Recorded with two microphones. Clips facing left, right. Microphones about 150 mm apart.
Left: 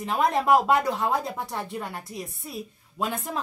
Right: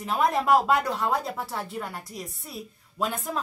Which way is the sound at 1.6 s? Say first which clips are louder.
Left 1 dB; 20° left (ahead or behind).